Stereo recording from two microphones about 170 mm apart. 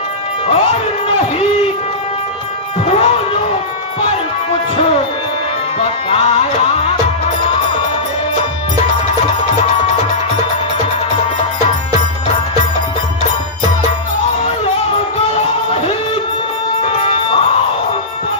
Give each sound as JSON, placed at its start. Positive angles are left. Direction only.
{"t": 0.4, "sound": "music", "side_deg": 40}
{"t": 2.8, "sound": "music", "side_deg": 35}
{"t": 16.8, "sound": "music", "side_deg": 35}